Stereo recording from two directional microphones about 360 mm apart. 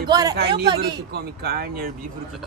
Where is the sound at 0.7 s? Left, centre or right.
Right.